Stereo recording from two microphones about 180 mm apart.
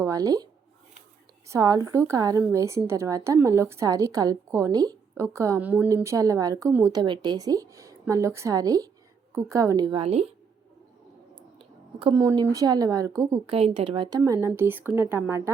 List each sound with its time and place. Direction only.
0.0 s speech: 20° right (ahead or behind)
1.5 s a woman's voice: 20° right (ahead or behind); by 10.3 s 35° right (ahead or behind)
11.9 s a woman's voice: 25° right (ahead or behind)
13.5 s a woman's voice: 30° right (ahead or behind)
14.4 s a woman's voice: 15° right (ahead or behind)